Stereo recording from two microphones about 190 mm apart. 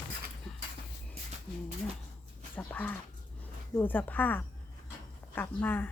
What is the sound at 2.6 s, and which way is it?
Dog, 10° left (ahead or behind).